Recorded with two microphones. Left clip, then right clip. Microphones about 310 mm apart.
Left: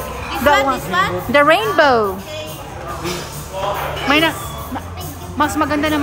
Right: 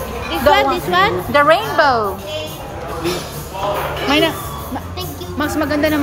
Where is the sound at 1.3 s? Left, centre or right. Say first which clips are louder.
Left 1 dB; centre.